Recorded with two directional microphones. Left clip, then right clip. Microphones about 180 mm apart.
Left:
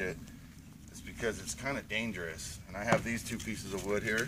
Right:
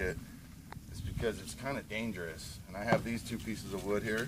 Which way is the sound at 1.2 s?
Centre (ahead or behind).